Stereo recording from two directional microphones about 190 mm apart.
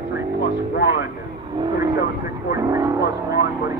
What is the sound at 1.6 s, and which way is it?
Speech, 20° right (ahead or behind).